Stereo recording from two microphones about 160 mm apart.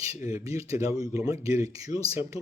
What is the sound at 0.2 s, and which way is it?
Speech, 20° right (ahead or behind).